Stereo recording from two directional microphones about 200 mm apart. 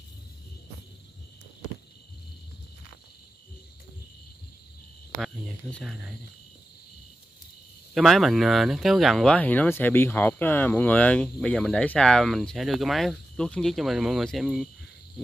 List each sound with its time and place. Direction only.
5.2 s speech: 5° left (ahead or behind)
7.9 s speech: centre (ahead or behind)